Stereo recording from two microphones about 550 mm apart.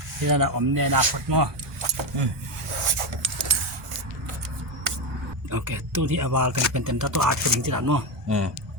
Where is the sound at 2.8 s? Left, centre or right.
Right.